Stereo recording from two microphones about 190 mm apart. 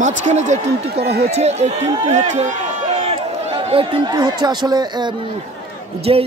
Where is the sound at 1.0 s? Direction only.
55° right (ahead or behind).